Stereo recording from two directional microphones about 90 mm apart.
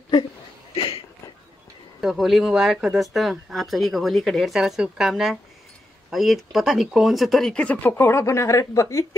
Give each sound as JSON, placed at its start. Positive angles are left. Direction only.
{"t": 0.7, "sound": "a sound", "side_deg": 90}
{"t": 2.0, "sound": "speech", "side_deg": 0}
{"t": 7.5, "sound": "speech", "side_deg": 15}
{"t": 7.9, "sound": "a woman's voice", "side_deg": 30}